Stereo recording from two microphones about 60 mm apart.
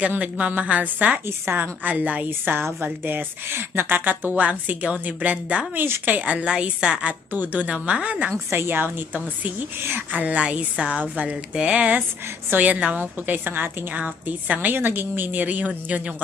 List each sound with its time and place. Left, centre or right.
0.2 s a woman's voice: right
7.3 s a woman's voice: right
8.3 s a woman's voice: right; by 11.9 s centre
12.5 s a woman's voice: right